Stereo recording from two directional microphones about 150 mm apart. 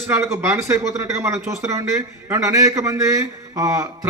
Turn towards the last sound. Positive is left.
turn(degrees=-20)  # may be behind; listen again after turning